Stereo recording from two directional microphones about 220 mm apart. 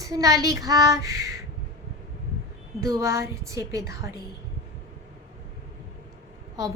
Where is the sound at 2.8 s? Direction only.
15° right (ahead or behind).